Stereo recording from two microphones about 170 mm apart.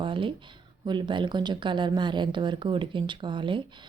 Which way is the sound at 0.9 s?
25° right (ahead or behind).